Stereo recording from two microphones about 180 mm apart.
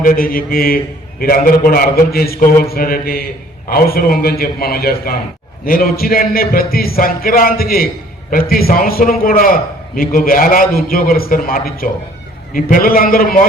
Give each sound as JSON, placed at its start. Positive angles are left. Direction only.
{"t": 0.0, "sound": "a man's voice", "side_deg": 50}